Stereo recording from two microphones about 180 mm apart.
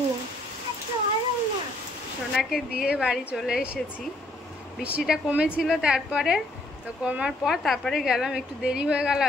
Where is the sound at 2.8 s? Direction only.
5° right (ahead or behind).